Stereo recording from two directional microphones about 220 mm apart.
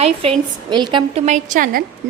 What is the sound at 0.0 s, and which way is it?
A woman's voice, 25° right (ahead or behind).